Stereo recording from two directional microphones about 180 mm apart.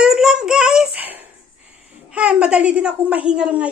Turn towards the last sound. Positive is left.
turn(degrees=-5)  # may be behind; listen again after turning